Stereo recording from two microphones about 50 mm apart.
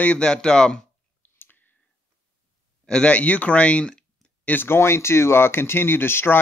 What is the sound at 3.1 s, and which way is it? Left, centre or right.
Speech, left.